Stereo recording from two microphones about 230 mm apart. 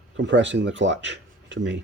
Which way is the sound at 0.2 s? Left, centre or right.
Right.